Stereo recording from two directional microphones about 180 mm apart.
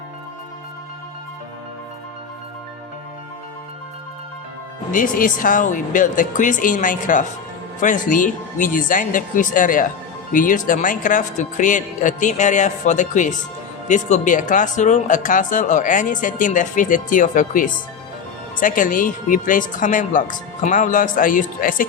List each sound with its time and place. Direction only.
4.9 s speech: 50° left (ahead or behind)